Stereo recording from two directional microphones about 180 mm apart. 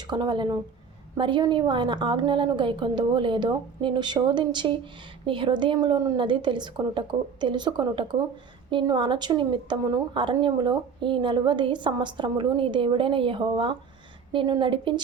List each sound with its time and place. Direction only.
0.1 s a woman's voice: 25° right (ahead or behind)